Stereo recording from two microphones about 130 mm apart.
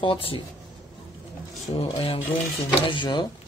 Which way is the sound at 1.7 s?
45° left (ahead or behind).